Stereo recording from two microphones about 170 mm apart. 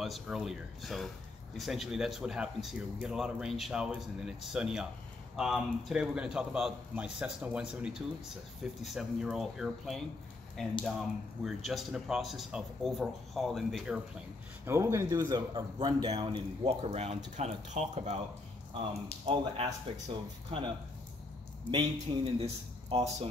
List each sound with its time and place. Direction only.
0.0 s speech: centre (ahead or behind)
14.7 s a man's voice: 15° right (ahead or behind); by 18.2 s 40° right (ahead or behind)
19.2 s speech: 35° right (ahead or behind)